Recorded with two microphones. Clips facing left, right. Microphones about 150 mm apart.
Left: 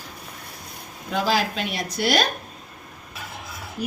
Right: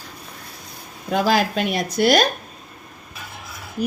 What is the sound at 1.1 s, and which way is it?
Speech, 50° right (ahead or behind).